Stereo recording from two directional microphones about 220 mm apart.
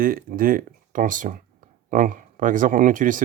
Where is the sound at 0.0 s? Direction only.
40° right (ahead or behind).